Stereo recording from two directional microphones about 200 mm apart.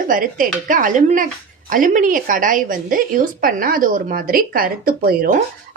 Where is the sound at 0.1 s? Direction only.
45° right (ahead or behind).